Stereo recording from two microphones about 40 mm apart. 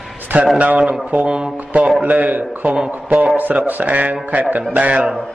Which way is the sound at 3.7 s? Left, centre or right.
Right.